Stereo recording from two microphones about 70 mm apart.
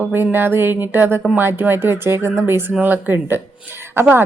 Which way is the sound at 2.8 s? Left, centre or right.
Right.